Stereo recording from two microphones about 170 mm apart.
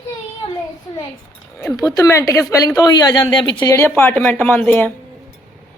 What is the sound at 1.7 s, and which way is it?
Speech, 20° left (ahead or behind).